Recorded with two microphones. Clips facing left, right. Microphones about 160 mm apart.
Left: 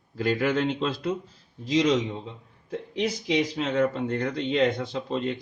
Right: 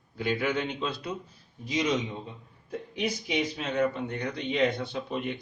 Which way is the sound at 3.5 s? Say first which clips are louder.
Left 3 dB; 90° left.